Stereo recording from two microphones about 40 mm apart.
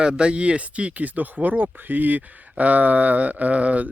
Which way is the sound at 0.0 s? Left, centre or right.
Right.